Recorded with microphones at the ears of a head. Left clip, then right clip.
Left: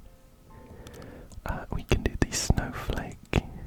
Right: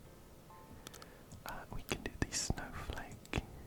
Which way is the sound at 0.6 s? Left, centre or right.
Left.